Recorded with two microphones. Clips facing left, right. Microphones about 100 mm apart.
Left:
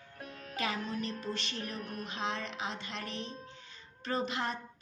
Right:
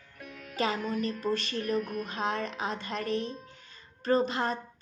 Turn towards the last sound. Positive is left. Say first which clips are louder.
# right 7 dB
turn(degrees=-35)  # may be behind; listen again after turning